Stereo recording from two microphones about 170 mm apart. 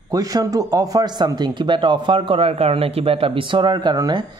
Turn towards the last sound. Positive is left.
turn(degrees=-25)  # may be behind; listen again after turning